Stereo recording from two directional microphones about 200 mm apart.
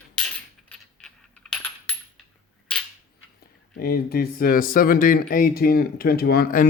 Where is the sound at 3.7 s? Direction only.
50° left (ahead or behind).